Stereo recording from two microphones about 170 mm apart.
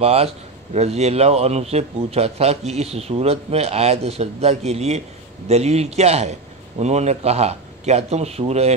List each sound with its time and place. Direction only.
0.0 s speech: 35° right (ahead or behind)